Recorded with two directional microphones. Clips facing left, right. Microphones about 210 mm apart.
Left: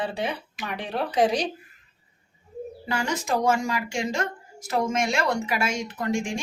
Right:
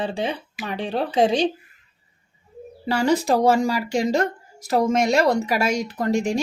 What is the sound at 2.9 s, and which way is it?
Speech, 35° right (ahead or behind).